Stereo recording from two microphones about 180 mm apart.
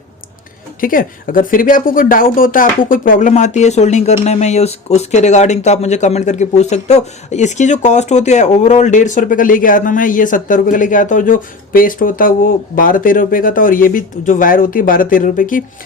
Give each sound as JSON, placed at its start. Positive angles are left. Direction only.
{"t": 0.8, "sound": "speech", "side_deg": 50}